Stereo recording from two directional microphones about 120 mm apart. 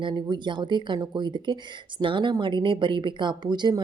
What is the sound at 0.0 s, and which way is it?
Speech, 40° right (ahead or behind).